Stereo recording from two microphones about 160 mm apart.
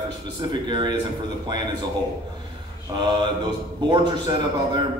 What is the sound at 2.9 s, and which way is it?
A man's voice, 30° right (ahead or behind).